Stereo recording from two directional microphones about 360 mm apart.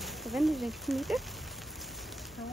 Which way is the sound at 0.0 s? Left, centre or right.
Centre.